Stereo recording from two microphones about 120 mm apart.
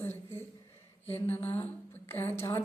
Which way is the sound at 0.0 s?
20° left (ahead or behind).